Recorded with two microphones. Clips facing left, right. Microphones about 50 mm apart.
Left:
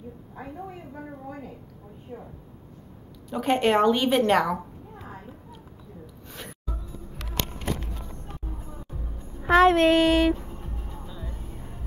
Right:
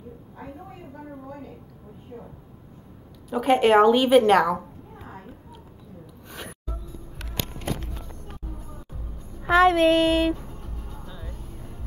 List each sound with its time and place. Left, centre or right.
2.1 s child singing: centre
3.3 s a sound: centre
6.0 s gasp: centre
8.5 s music: left
9.4 s child singing: centre
10.3 s music: left